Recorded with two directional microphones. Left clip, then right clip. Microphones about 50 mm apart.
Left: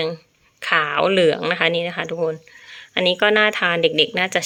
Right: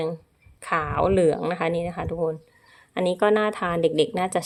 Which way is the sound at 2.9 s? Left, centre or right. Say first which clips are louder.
Left 5 dB; right.